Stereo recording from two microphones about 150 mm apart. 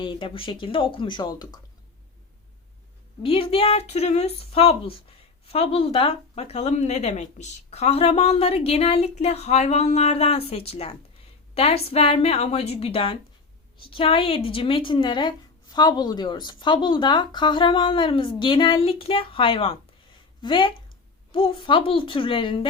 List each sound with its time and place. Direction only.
0.0 s a woman's voice: 35° left (ahead or behind)
3.2 s a woman's voice: 40° left (ahead or behind)